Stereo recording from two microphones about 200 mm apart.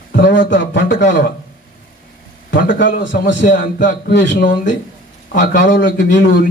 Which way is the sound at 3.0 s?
65° left (ahead or behind).